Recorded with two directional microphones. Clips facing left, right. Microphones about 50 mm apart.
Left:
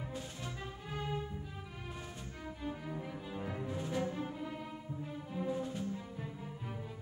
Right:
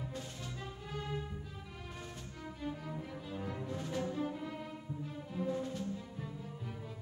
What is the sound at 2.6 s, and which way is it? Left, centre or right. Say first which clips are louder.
Music: even; centre.